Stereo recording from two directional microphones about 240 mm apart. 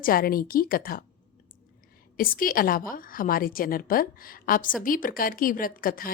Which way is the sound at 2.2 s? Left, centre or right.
Left.